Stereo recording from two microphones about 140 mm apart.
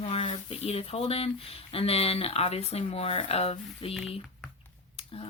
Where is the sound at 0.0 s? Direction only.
40° left (ahead or behind).